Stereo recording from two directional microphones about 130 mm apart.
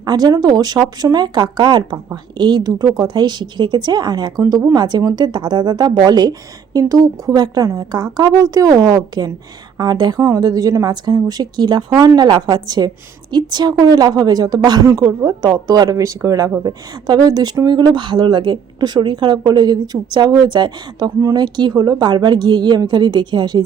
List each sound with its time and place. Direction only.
0.0 s a woman's voice: 30° right (ahead or behind)